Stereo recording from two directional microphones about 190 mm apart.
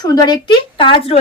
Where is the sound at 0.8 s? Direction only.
25° left (ahead or behind).